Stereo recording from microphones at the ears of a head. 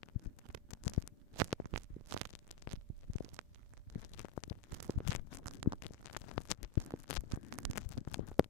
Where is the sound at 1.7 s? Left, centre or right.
Right.